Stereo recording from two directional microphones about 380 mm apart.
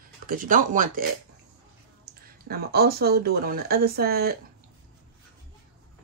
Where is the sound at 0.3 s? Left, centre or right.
Right.